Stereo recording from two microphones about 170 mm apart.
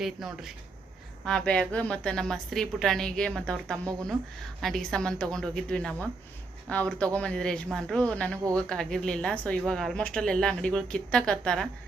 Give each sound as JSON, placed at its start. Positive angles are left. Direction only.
{"t": 0.0, "sound": "speech", "side_deg": 0}